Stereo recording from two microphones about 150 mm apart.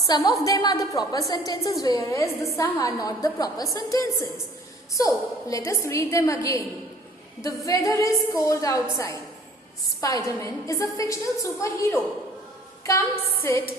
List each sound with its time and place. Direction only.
0.1 s a woman's voice: 25° left (ahead or behind)
13.4 s music: 15° left (ahead or behind)